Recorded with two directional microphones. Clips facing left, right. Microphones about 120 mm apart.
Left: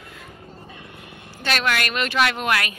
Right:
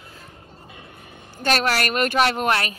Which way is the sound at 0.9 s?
70° left (ahead or behind).